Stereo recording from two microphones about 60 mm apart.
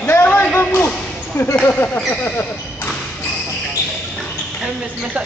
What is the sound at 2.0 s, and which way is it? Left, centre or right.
Speech, left.